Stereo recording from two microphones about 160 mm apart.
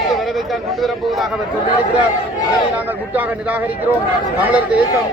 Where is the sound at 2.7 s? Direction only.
10° right (ahead or behind).